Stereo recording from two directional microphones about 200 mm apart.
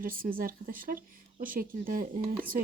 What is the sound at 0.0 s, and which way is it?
Speech, 45° right (ahead or behind).